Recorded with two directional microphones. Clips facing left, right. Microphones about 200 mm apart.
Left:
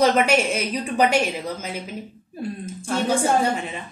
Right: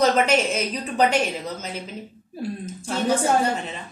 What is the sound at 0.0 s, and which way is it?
A woman's voice, 10° left (ahead or behind).